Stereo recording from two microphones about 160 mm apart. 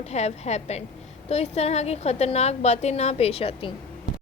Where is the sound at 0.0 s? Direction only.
45° left (ahead or behind).